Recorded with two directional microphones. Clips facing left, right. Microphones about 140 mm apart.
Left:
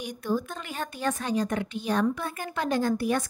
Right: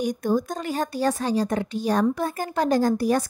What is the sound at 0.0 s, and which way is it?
Speech, 40° right (ahead or behind).